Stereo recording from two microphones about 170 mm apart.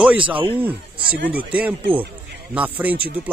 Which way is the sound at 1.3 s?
10° right (ahead or behind).